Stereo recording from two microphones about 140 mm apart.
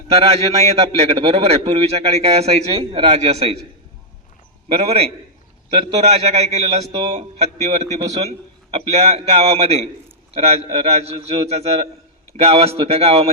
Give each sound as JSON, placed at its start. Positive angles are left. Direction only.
{"t": 0.1, "sound": "a man's voice", "side_deg": -45}
{"t": 4.7, "sound": "a man's voice", "side_deg": -45}